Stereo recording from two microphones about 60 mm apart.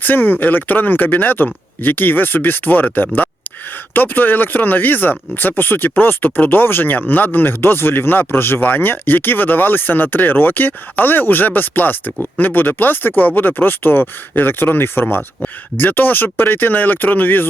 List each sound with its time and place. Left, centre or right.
0.0 s speech: left